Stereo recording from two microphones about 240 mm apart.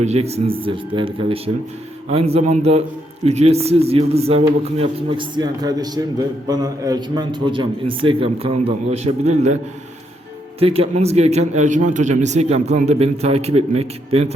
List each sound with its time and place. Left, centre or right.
0.0 s a man's voice: right
10.6 s a man's voice: right